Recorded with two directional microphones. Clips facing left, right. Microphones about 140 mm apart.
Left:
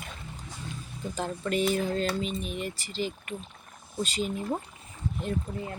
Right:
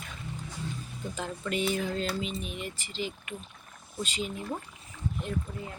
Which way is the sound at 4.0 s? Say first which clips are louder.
Left 4 dB; 45° left (ahead or behind).